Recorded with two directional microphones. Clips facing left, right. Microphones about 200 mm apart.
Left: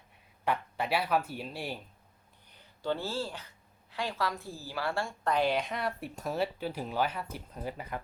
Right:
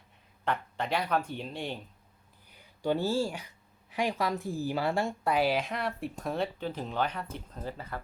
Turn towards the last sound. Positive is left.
turn(degrees=15)  # may be behind; listen again after turning